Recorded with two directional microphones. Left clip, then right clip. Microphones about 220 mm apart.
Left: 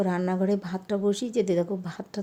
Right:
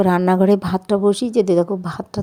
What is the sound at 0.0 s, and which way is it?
A woman's voice, 35° right (ahead or behind).